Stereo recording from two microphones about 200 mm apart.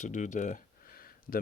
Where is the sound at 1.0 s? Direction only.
45° left (ahead or behind).